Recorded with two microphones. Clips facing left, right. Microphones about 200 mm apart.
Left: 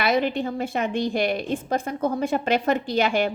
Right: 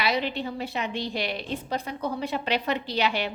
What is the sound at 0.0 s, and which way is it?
A woman's voice, 50° left (ahead or behind).